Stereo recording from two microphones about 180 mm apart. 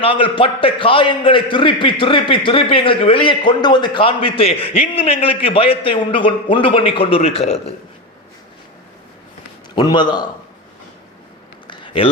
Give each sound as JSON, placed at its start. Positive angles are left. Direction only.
{"t": 0.0, "sound": "a man's voice", "side_deg": 30}
{"t": 9.7, "sound": "a man's voice", "side_deg": 25}
{"t": 11.7, "sound": "a sound", "side_deg": 25}